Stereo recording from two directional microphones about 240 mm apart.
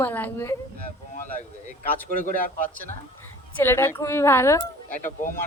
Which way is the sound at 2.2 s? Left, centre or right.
Left.